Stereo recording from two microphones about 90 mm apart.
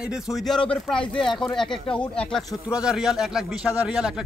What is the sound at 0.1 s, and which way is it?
Speech, centre (ahead or behind).